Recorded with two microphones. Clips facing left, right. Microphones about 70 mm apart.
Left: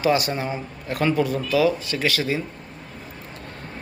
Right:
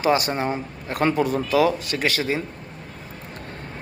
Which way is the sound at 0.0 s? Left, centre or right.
Right.